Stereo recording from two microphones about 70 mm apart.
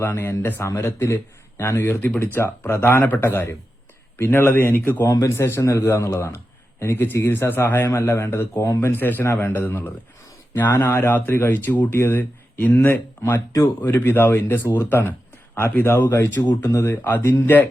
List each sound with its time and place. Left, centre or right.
0.0 s a man's voice: left
1.9 s a man's voice: left
5.0 s speech: left
5.3 s a man's voice: left
9.2 s a man's voice: left
13.3 s speech: left
13.8 s a man's voice: left